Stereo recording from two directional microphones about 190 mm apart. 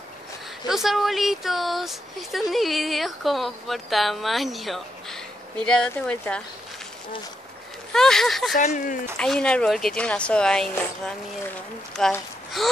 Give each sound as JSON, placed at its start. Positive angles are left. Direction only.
{"t": 0.7, "sound": "speech", "side_deg": 0}
{"t": 7.9, "sound": "speech", "side_deg": 0}
{"t": 8.5, "sound": "speech", "side_deg": 45}
{"t": 9.2, "sound": "speech", "side_deg": 5}